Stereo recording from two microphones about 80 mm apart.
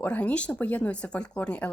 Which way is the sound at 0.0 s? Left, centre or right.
Centre.